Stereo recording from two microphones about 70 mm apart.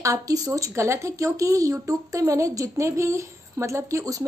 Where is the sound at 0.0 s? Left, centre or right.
Right.